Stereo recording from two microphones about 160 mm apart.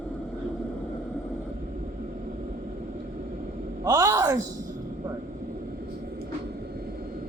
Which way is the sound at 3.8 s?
20° right (ahead or behind).